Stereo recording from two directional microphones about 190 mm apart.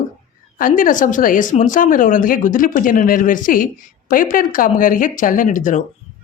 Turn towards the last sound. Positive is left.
turn(degrees=45)  # may be behind; listen again after turning